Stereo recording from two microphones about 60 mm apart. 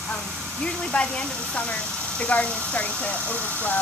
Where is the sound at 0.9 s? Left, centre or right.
Centre.